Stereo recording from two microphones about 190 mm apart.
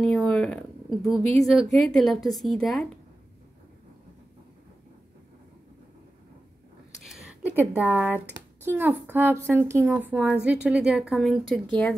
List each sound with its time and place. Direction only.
0.0 s a woman's voice: 5° left (ahead or behind)
7.1 s a sound: centre (ahead or behind)
7.7 s a woman's voice: 10° right (ahead or behind)